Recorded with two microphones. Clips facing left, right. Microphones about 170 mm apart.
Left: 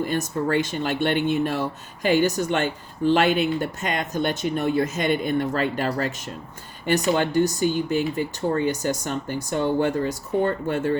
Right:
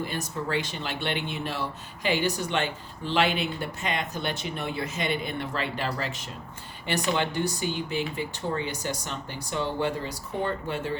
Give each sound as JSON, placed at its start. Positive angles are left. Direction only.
{"t": 0.0, "sound": "speech", "side_deg": 50}